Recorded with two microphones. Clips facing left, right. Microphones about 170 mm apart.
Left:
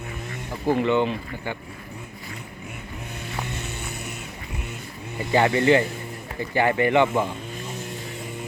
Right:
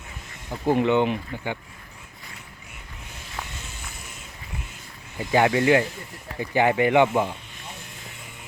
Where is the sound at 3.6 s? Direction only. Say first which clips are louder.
Left 8 dB; 70° left (ahead or behind).